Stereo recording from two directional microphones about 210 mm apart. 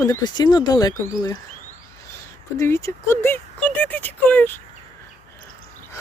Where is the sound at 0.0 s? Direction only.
15° left (ahead or behind).